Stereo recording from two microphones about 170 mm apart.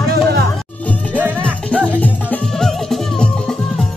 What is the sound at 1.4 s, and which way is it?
Music, 5° left (ahead or behind).